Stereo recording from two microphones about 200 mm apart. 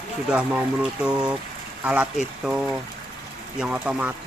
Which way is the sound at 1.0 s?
5° right (ahead or behind).